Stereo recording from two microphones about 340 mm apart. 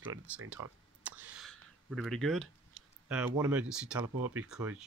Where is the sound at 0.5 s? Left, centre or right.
Centre.